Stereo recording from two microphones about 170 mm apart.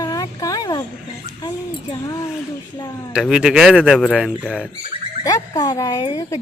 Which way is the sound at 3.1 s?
5° right (ahead or behind).